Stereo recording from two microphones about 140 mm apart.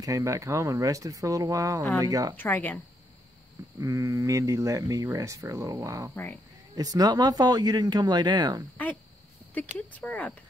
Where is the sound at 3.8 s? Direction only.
20° right (ahead or behind).